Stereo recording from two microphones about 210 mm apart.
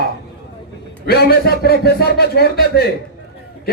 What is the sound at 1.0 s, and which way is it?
A man's voice, 50° left (ahead or behind).